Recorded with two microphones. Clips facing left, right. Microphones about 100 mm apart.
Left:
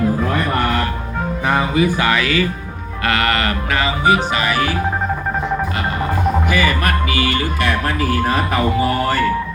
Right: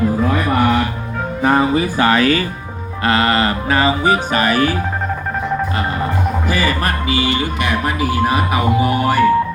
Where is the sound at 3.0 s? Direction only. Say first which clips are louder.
Right 3 dB; 30° right (ahead or behind).